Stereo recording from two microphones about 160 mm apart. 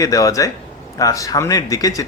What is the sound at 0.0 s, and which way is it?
Speech, 20° left (ahead or behind).